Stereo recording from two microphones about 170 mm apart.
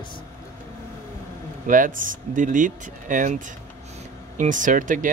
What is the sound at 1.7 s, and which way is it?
Speech, 50° right (ahead or behind).